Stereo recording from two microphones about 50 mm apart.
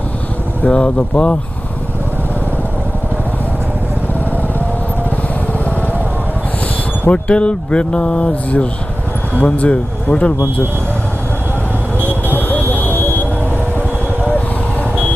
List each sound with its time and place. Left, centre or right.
0.6 s speech: left
7.1 s speech: left
12.3 s vehicle: left
13.7 s vehicle: right